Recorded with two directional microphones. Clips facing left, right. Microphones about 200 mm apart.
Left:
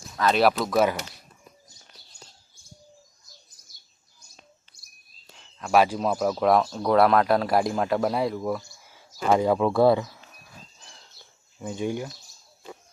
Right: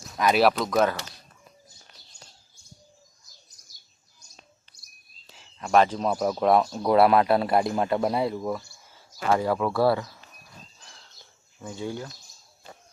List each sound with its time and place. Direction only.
0.3 s speech: centre (ahead or behind)
5.4 s a sound: centre (ahead or behind)
5.8 s speech: 5° left (ahead or behind)
11.6 s speech: 15° left (ahead or behind)